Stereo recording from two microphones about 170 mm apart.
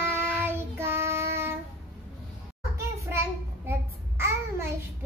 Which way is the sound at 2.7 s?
15° right (ahead or behind).